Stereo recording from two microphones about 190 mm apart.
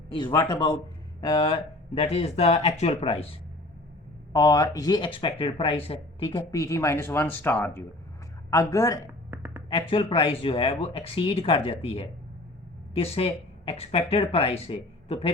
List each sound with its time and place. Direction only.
0.1 s speech: 25° left (ahead or behind)
4.3 s speech: 20° left (ahead or behind)
9.3 s a sound: 10° right (ahead or behind)
9.6 s speech: 25° left (ahead or behind)